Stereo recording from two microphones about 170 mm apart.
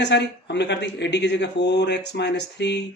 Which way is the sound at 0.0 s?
85° left.